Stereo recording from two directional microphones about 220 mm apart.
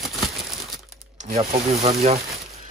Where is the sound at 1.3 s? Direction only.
30° right (ahead or behind).